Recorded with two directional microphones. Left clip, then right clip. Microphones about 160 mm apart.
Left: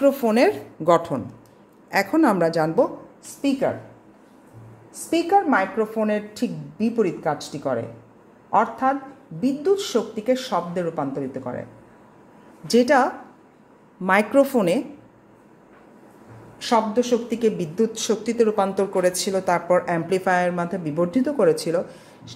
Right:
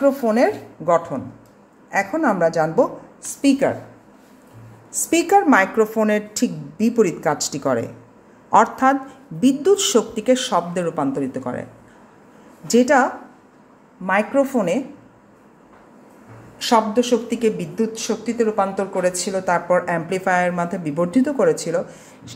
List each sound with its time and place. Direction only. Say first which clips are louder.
0.0 s speech: right 1 dB; 20° left (ahead or behind)
0.8 s a woman's voice: even; 40° left (ahead or behind); by 2.7 s 20° left (ahead or behind)
3.4 s a woman's voice: right 5 dB; 10° right (ahead or behind)
5.1 s a woman's voice: right 4 dB; 20° right (ahead or behind)
12.6 s speech: right 2 dB; 5° left (ahead or behind)
14.0 s a woman's voice: left 1 dB; 40° left (ahead or behind)
16.5 s a woman's voice: right 3 dB; 5° right (ahead or behind)
17.3 s speech: right 1 dB; 15° left (ahead or behind)